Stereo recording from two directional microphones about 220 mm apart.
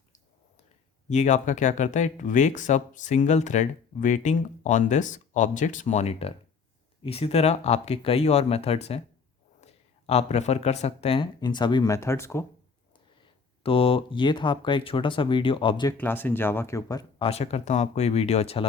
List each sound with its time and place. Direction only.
1.1 s speech: 30° left (ahead or behind)
10.1 s speech: 30° left (ahead or behind); by 12.5 s 10° left (ahead or behind)
13.6 s speech: 25° left (ahead or behind)
16.0 s speech: 10° left (ahead or behind); by 18.6 s 30° left (ahead or behind)